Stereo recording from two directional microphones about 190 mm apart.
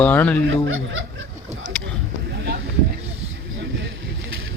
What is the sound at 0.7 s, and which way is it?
Speech, 90° right.